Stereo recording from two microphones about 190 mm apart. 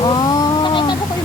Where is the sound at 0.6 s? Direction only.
25° left (ahead or behind).